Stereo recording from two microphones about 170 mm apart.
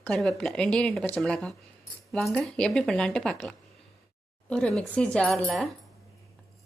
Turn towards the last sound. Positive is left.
turn(degrees=0)  # may be behind; listen again after turning